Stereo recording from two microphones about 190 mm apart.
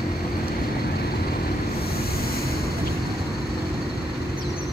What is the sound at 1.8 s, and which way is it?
Vehicle, 55° left (ahead or behind).